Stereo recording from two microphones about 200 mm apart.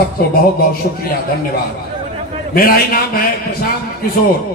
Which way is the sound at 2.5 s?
45° left (ahead or behind).